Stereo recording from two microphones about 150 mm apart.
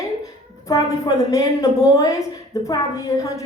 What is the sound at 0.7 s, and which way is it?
A woman's voice, 20° left (ahead or behind).